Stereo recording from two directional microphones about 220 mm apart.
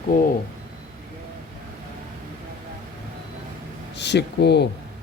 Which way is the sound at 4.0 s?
50° left (ahead or behind).